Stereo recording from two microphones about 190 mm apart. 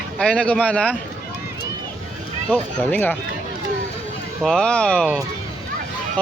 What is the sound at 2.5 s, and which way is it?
Speech, 10° left (ahead or behind).